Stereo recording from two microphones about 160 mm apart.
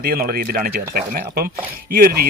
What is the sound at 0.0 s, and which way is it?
Speech, 65° right (ahead or behind).